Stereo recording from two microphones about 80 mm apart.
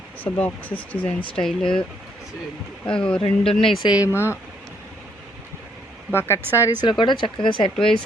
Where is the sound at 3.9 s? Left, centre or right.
Left.